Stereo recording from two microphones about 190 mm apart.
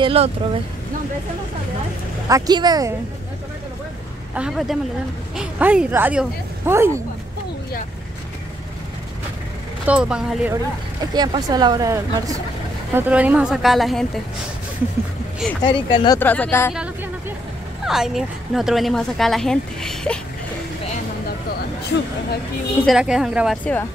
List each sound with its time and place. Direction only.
0.0 s speech: 30° right (ahead or behind)
2.2 s speech: 20° right (ahead or behind)
4.4 s speech: centre (ahead or behind)
9.8 s speech: 5° right (ahead or behind)
11.1 s speech: 20° right (ahead or behind); by 14.2 s centre (ahead or behind)
15.6 s speech: 25° left (ahead or behind)
16.2 s speech: 10° left (ahead or behind)
17.8 s speech: centre (ahead or behind)
22.8 s speech: 5° right (ahead or behind)
23.6 s speech: 10° left (ahead or behind)